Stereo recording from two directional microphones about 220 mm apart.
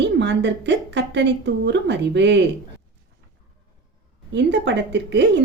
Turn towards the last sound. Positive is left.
turn(degrees=-50)  # may be behind; listen again after turning